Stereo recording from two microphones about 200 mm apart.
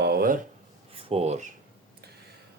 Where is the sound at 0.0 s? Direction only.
50° right (ahead or behind).